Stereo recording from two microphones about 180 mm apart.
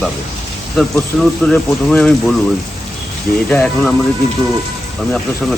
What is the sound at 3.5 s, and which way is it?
Speech, 5° left (ahead or behind).